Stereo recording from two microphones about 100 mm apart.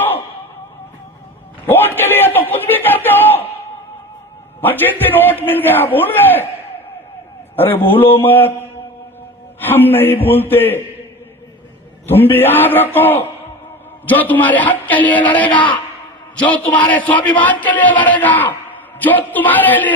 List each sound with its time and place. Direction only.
1.6 s a sound: 20° left (ahead or behind)
4.6 s a man's voice: 20° left (ahead or behind)
7.5 s a man's voice: 20° left (ahead or behind)
9.6 s a man's voice: 20° left (ahead or behind)
12.0 s a man's voice: 20° left (ahead or behind)
15.4 s speech: 55° left (ahead or behind)
16.4 s a man's voice: 15° left (ahead or behind)